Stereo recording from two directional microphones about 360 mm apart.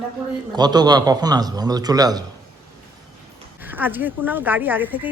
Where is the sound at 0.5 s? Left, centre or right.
Centre.